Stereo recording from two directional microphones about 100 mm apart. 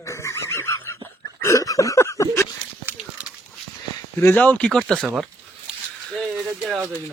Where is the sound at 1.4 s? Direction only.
30° left (ahead or behind).